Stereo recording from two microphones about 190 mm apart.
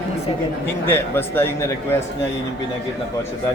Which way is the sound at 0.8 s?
10° left (ahead or behind).